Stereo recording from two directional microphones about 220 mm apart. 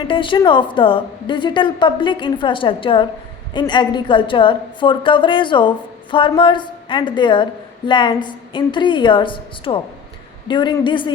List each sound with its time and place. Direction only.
0.1 s a woman's voice: 20° left (ahead or behind)